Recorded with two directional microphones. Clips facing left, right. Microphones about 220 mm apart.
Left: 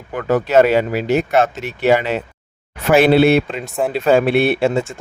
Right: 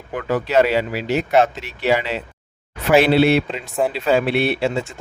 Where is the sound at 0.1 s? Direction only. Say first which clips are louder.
Left 4 dB; 45° left (ahead or behind).